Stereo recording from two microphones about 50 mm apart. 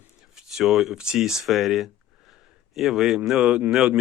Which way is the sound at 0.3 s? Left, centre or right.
Centre.